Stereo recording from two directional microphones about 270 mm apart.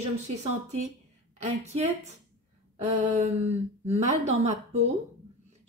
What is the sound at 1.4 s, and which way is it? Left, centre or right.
Speech, right.